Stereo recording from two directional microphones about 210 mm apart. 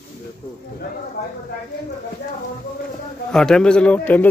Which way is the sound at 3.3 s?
5° left (ahead or behind).